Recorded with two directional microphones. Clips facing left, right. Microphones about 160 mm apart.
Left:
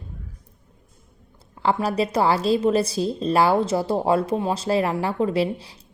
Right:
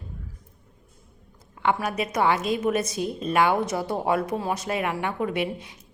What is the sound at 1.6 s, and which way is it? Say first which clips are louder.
A woman's voice: left 3 dB; 35° left (ahead or behind).